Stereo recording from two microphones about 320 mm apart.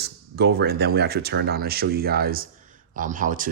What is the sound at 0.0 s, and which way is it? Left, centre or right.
Speech, right.